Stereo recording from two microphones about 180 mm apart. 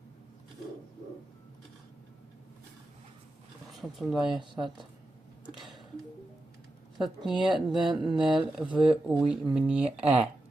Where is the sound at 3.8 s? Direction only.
Centre (ahead or behind).